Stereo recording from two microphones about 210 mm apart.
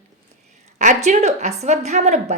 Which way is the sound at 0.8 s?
35° right (ahead or behind).